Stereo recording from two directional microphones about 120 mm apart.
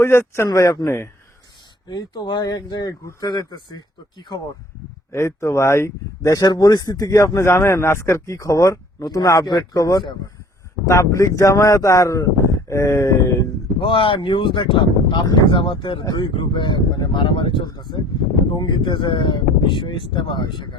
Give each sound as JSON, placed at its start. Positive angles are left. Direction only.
{"t": 0.0, "sound": "speech", "side_deg": 20}
{"t": 1.9, "sound": "speech", "side_deg": 35}
{"t": 5.1, "sound": "speech", "side_deg": 25}
{"t": 10.8, "sound": "speech", "side_deg": 25}
{"t": 13.7, "sound": "speech", "side_deg": 45}